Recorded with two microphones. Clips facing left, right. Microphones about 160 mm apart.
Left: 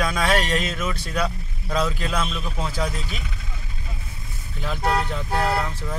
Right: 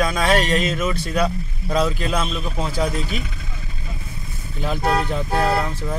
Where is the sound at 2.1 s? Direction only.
15° right (ahead or behind).